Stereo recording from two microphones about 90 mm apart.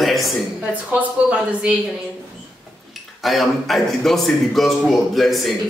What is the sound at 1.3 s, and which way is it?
Speech, 15° right (ahead or behind).